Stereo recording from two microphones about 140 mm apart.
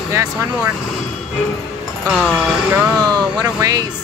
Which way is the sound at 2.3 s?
5° right (ahead or behind).